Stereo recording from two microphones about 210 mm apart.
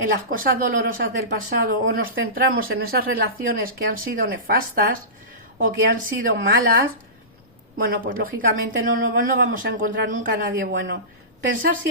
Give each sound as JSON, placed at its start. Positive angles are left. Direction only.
{"t": 0.3, "sound": "speech", "side_deg": -40}
{"t": 7.9, "sound": "speech", "side_deg": -45}